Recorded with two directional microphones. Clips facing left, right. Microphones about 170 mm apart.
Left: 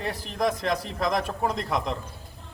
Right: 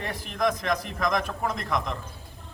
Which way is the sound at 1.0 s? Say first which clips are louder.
Left 3 dB; 30° left (ahead or behind).